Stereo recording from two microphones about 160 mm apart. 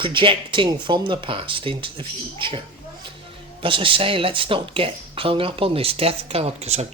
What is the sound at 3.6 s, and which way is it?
Speech, 30° right (ahead or behind).